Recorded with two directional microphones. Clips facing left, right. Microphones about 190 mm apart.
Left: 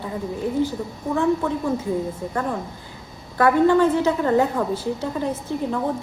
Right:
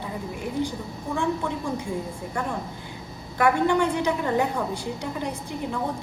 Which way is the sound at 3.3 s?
15° right (ahead or behind).